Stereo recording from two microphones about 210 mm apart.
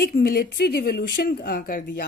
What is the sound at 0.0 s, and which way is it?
Speech, 45° left (ahead or behind).